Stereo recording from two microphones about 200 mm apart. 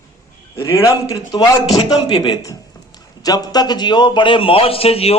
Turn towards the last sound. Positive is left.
turn(degrees=30)  # may be behind; listen again after turning